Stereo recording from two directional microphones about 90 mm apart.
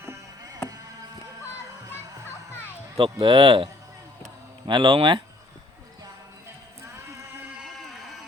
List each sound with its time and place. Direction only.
3.0 s speech: 75° right (ahead or behind)
4.6 s speech: 65° right (ahead or behind)